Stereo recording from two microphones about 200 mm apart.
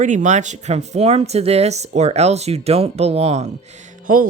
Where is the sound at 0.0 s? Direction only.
40° right (ahead or behind).